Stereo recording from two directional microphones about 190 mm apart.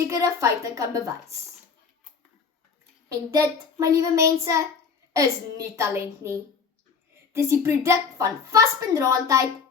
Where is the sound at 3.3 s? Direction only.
15° right (ahead or behind).